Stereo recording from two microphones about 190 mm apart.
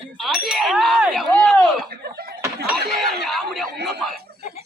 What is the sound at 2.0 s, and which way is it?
Snicker, 55° right (ahead or behind).